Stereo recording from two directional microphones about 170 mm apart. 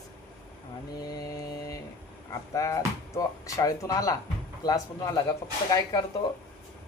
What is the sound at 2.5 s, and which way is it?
A woman's voice, 20° left (ahead or behind).